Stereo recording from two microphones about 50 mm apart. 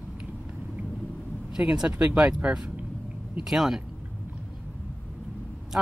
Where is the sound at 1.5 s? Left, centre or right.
Centre.